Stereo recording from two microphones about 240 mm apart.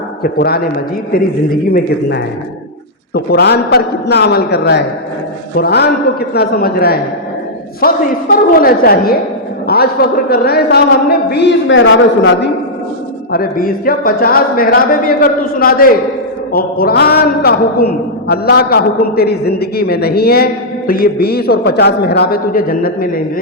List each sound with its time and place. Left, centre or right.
0.2 s a man's voice: left
1.7 s a man's voice: left
8.6 s a man's voice: left
13.3 s a man's voice: left